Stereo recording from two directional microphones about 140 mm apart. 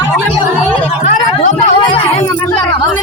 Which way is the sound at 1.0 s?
60° left (ahead or behind).